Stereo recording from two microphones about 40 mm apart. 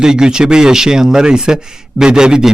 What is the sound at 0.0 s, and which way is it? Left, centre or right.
Speech, centre.